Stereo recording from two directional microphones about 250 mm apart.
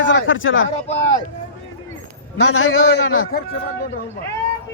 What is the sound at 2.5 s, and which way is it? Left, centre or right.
Speech, left.